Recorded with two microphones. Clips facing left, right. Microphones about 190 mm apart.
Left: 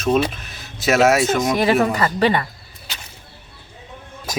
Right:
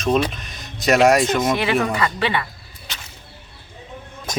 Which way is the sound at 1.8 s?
40° left (ahead or behind).